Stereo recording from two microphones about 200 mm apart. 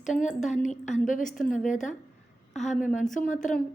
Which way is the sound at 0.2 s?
35° left (ahead or behind).